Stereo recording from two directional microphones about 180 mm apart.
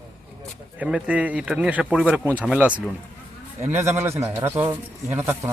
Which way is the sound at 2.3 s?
10° left (ahead or behind).